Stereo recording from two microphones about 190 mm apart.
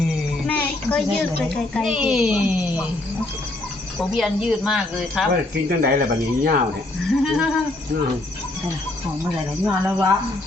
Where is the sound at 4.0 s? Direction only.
Centre (ahead or behind).